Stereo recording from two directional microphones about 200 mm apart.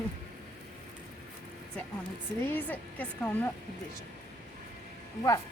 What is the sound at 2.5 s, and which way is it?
Speech, 10° left (ahead or behind).